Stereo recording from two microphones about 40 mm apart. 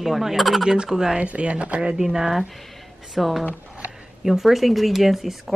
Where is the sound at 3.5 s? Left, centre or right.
Right.